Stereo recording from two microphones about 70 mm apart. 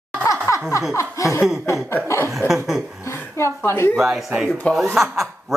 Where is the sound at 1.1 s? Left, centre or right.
Left.